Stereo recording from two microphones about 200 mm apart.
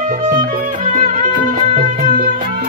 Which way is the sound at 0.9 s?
40° right (ahead or behind).